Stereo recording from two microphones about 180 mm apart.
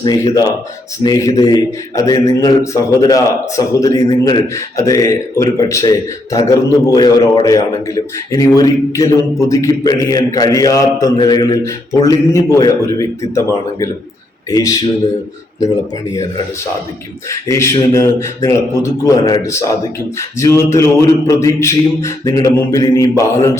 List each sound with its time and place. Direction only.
0.0 s a man's voice: 20° left (ahead or behind)
12.0 s mantra: 15° left (ahead or behind)
14.5 s a man's voice: 20° left (ahead or behind)
17.5 s mantra: 15° left (ahead or behind)